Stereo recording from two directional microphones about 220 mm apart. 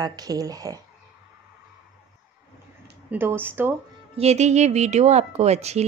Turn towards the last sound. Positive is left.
turn(degrees=-30)  # may be behind; listen again after turning